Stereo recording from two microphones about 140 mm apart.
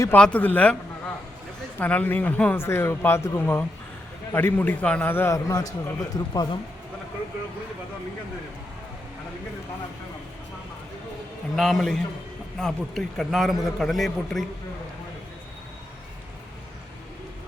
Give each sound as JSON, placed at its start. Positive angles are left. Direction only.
{"t": 0.1, "sound": "a man's voice", "side_deg": 10}
{"t": 11.5, "sound": "speech", "side_deg": 0}